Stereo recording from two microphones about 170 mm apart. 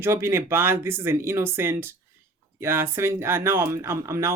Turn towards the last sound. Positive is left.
turn(degrees=-15)  # may be behind; listen again after turning